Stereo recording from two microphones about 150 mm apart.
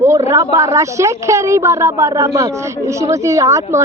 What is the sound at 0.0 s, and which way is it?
A woman's voice, 20° right (ahead or behind).